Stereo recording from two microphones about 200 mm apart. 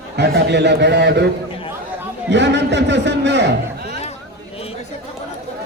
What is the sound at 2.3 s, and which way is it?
A man's voice, 60° right (ahead or behind).